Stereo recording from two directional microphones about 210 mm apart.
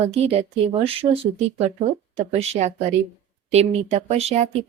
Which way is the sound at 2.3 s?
30° right (ahead or behind).